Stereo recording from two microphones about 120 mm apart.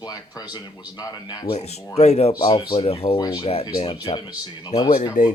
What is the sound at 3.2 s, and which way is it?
Speech, 35° left (ahead or behind).